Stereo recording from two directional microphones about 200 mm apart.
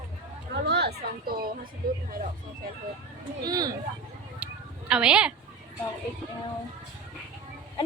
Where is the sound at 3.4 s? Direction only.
20° right (ahead or behind).